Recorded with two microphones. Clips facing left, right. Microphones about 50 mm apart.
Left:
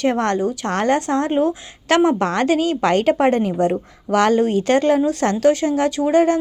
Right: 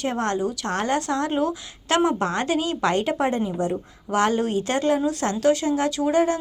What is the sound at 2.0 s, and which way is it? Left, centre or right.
A woman's voice, left.